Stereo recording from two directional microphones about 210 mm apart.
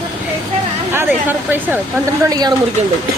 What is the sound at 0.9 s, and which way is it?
Speech, 10° right (ahead or behind).